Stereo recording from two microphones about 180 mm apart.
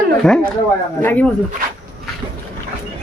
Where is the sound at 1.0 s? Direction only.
10° left (ahead or behind).